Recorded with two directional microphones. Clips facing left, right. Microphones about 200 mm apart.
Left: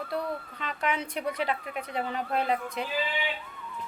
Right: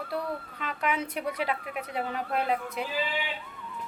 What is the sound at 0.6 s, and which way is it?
Speech, 5° right (ahead or behind).